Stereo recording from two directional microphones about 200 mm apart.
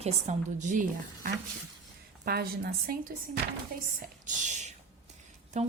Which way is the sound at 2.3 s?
50° right (ahead or behind).